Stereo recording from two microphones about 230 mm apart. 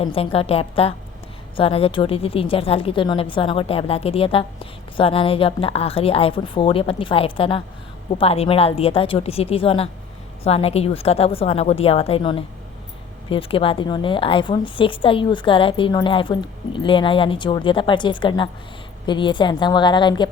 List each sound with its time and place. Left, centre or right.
0.0 s speech: left